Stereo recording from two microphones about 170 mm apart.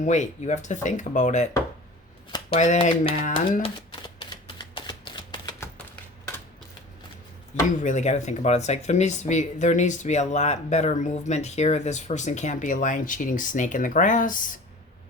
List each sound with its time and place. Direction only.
0.0 s speech: 45° left (ahead or behind)
2.6 s speech: 45° left (ahead or behind)
3.6 s typewriter: 25° left (ahead or behind)
7.8 s speech: 45° left (ahead or behind)